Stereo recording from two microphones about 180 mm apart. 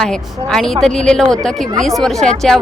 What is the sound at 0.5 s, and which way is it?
Speech, 5° left (ahead or behind).